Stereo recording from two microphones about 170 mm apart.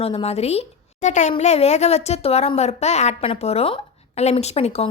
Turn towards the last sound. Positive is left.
turn(degrees=40)  # may be behind; listen again after turning